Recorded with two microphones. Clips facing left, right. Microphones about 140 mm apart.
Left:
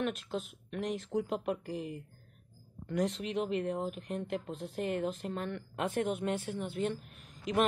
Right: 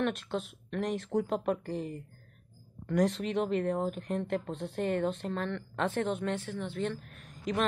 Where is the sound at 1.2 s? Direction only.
45° right (ahead or behind).